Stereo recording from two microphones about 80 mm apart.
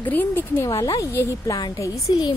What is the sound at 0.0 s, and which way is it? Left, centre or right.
Speech, left.